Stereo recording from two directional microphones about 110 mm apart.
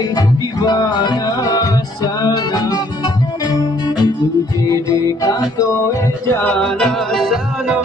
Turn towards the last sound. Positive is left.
turn(degrees=15)  # may be behind; listen again after turning